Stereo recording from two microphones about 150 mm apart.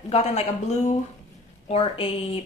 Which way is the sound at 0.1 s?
45° left (ahead or behind).